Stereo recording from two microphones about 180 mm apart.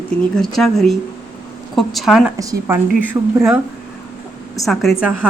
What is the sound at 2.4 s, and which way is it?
Speech, 20° right (ahead or behind).